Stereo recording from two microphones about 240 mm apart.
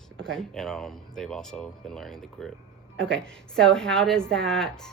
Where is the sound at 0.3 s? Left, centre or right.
Centre.